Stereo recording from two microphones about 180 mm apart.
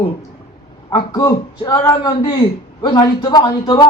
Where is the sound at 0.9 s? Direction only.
20° left (ahead or behind).